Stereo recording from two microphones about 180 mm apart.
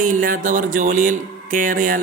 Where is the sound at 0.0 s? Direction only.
50° right (ahead or behind).